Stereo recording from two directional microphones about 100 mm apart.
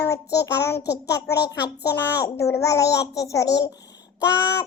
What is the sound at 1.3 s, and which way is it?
A child's voice, 40° left (ahead or behind).